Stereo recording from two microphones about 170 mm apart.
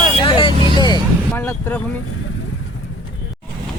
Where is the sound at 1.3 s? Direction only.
10° left (ahead or behind).